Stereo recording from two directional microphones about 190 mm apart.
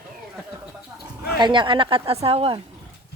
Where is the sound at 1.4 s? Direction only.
25° right (ahead or behind).